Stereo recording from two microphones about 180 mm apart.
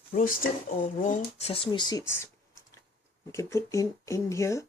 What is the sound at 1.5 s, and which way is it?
Speech, 30° left (ahead or behind).